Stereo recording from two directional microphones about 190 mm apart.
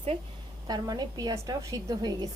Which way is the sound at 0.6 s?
20° right (ahead or behind).